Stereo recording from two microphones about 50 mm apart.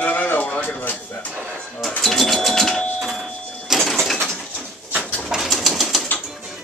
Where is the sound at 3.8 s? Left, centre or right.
Centre.